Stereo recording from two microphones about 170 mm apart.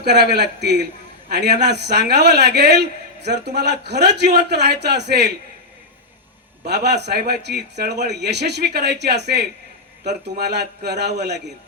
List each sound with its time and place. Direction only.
0.0 s a man's voice: 75° right (ahead or behind)
6.7 s a man's voice: 75° right (ahead or behind)